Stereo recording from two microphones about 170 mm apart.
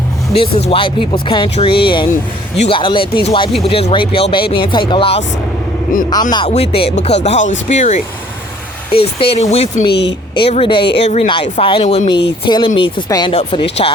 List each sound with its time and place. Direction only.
0.3 s speech: 30° left (ahead or behind)
6.5 s speech: 35° left (ahead or behind)
8.9 s speech: 35° left (ahead or behind)
9.8 s speech: 85° left
10.5 s speech: 30° left (ahead or behind)